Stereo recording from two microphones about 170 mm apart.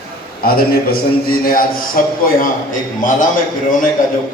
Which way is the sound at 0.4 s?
60° left (ahead or behind).